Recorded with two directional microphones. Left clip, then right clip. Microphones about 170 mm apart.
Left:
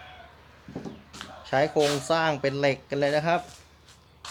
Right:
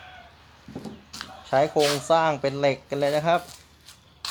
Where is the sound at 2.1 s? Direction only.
10° right (ahead or behind).